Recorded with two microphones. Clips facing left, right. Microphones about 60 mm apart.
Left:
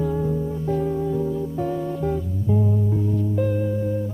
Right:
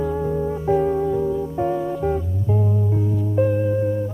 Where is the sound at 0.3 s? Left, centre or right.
Right.